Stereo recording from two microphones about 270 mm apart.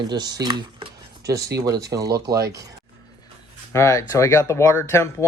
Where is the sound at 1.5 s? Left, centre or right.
Right.